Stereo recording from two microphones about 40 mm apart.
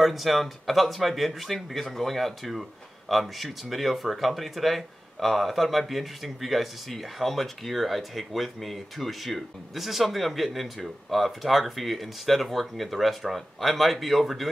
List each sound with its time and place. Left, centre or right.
0.0 s speech: centre